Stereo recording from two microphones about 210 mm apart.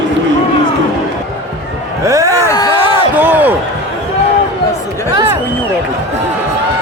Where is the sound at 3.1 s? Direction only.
10° right (ahead or behind).